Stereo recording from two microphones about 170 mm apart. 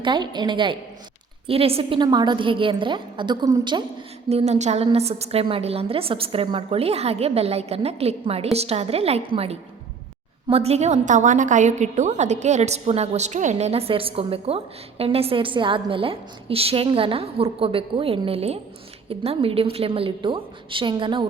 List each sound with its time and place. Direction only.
0.0 s a woman's voice: 25° right (ahead or behind)
4.3 s a woman's voice: 40° right (ahead or behind)